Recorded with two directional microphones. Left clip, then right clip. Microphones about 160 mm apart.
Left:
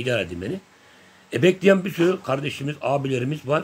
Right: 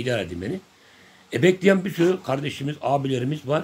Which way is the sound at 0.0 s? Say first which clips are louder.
Left 2 dB; 10° left (ahead or behind).